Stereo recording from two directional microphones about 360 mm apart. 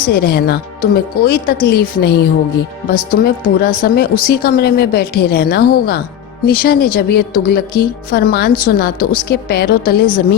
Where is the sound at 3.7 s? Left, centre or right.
Left.